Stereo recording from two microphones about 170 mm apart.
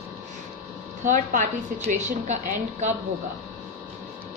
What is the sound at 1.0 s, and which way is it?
A woman's voice, 45° right (ahead or behind).